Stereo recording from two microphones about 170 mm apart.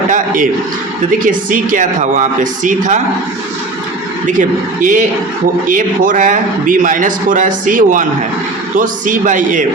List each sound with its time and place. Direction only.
1.2 s a man's voice: 50° right (ahead or behind)
4.4 s a man's voice: 50° right (ahead or behind)